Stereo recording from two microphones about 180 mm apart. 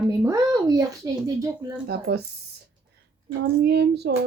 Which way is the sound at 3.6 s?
65° right (ahead or behind).